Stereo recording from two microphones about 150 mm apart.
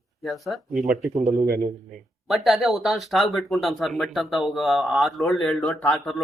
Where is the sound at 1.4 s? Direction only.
90° right.